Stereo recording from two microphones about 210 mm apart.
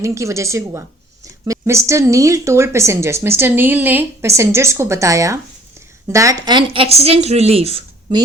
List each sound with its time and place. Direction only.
0.0 s a woman's voice: 15° right (ahead or behind)